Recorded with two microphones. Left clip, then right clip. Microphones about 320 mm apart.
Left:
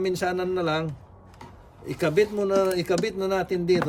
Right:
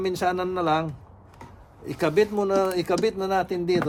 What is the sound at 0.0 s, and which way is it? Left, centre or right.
Speech, centre.